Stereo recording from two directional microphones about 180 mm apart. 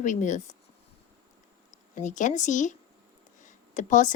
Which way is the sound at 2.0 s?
45° left (ahead or behind).